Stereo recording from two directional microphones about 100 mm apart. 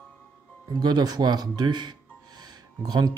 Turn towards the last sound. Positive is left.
turn(degrees=-45)  # may be behind; listen again after turning